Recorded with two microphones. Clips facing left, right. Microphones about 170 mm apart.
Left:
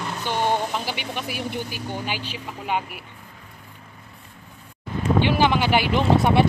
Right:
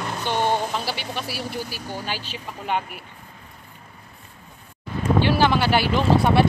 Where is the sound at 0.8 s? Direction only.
15° left (ahead or behind).